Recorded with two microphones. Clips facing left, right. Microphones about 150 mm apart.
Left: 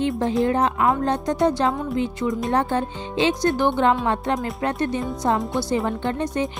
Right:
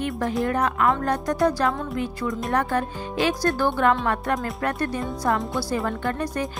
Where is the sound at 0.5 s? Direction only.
25° left (ahead or behind).